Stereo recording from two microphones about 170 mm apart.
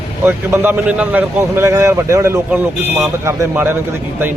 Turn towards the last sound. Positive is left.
turn(degrees=-15)  # may be behind; listen again after turning